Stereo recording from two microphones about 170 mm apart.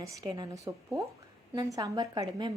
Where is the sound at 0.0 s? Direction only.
20° right (ahead or behind).